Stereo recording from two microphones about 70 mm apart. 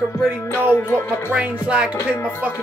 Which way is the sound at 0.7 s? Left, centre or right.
Left.